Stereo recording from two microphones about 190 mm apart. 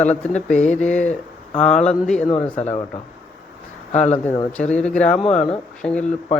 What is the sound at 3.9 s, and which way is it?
Speech, 35° left (ahead or behind).